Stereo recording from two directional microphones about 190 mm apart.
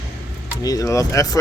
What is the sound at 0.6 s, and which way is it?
Speech, 20° left (ahead or behind).